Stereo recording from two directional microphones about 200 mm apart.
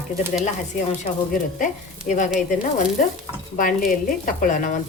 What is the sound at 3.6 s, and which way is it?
Stir, 45° left (ahead or behind).